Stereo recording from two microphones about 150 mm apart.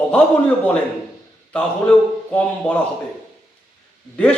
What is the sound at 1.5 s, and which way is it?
A man's voice, 10° left (ahead or behind).